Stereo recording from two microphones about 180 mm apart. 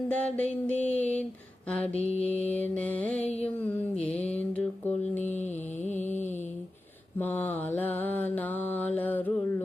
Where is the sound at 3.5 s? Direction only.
10° left (ahead or behind).